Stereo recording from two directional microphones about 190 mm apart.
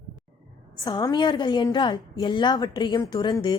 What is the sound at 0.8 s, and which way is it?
A woman's voice, 20° left (ahead or behind).